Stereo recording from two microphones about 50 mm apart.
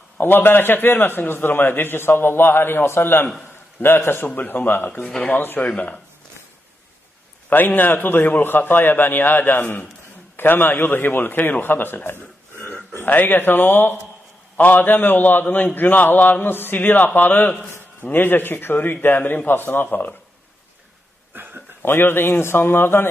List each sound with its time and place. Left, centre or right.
0.2 s a man's voice: left
5.0 s speech: centre
5.3 s a man's voice: left
5.6 s speech: left
7.4 s a man's voice: left
21.3 s a sound: right
21.8 s a man's voice: left